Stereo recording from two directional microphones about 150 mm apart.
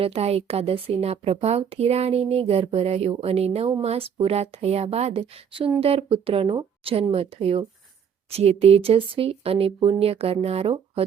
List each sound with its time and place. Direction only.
0.0 s speech: 40° right (ahead or behind)